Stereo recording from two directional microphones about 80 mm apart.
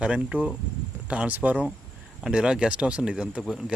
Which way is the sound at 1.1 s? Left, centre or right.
Centre.